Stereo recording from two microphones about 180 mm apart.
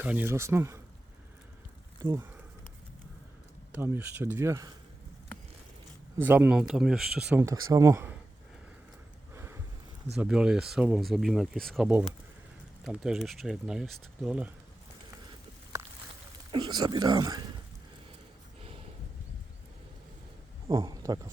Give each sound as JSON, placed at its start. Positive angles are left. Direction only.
{"t": 0.0, "sound": "speech", "side_deg": -10}
{"t": 2.0, "sound": "speech", "side_deg": -20}
{"t": 3.7, "sound": "speech", "side_deg": -10}
{"t": 6.1, "sound": "speech", "side_deg": -10}
{"t": 7.4, "sound": "speech", "side_deg": -20}
{"t": 9.3, "sound": "a sound", "side_deg": -15}
{"t": 10.2, "sound": "speech", "side_deg": -5}
{"t": 16.5, "sound": "speech", "side_deg": -25}
{"t": 20.7, "sound": "a sound", "side_deg": -20}